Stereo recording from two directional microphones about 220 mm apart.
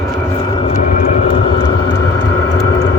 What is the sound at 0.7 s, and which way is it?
Vehicle, 35° left (ahead or behind).